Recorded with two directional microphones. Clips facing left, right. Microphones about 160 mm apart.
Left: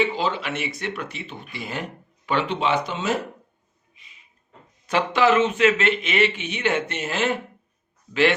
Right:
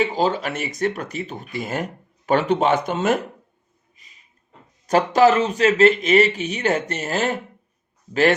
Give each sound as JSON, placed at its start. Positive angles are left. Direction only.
{"t": 0.0, "sound": "speech", "side_deg": -40}
{"t": 3.9, "sound": "a sound", "side_deg": -40}
{"t": 4.9, "sound": "speech", "side_deg": -40}